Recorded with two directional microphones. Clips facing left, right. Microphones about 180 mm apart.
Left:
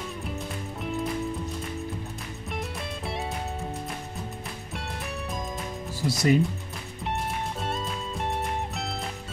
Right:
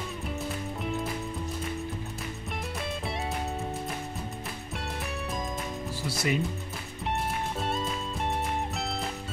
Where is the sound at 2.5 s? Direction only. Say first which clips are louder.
Left 1 dB; centre (ahead or behind).